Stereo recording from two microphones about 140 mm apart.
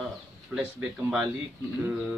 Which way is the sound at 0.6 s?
10° right (ahead or behind).